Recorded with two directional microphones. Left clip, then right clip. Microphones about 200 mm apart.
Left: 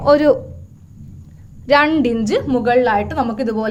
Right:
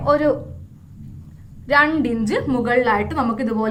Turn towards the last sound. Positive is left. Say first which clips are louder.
# left 2 dB
turn(degrees=30)  # may be behind; listen again after turning